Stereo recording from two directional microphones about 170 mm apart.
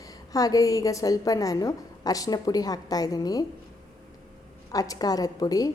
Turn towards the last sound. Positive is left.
turn(degrees=20)  # may be behind; listen again after turning